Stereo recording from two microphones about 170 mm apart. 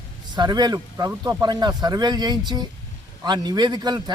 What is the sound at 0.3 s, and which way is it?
A man's voice, 25° right (ahead or behind).